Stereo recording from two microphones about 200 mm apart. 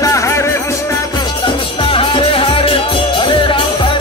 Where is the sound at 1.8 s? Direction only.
25° left (ahead or behind).